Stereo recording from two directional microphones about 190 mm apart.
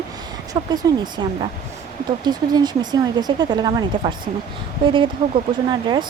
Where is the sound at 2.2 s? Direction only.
20° right (ahead or behind).